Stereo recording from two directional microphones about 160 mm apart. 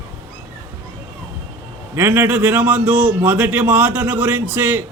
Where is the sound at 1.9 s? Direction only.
15° right (ahead or behind).